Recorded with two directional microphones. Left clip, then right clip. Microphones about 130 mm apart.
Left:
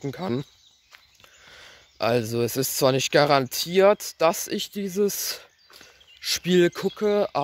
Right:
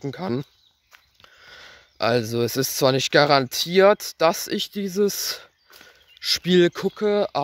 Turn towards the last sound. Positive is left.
turn(degrees=-20)  # may be behind; listen again after turning